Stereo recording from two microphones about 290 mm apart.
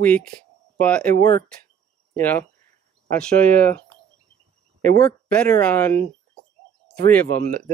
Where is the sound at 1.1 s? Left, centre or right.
Right.